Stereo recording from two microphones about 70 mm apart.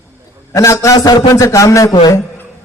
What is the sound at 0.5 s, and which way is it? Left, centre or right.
A man's voice, left.